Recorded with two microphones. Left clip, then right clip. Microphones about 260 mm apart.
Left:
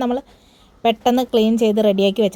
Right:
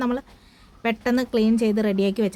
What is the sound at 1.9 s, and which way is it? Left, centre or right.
Speech, centre.